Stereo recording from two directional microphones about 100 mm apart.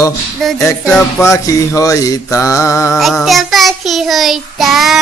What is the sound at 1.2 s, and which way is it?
Mantra, 35° left (ahead or behind).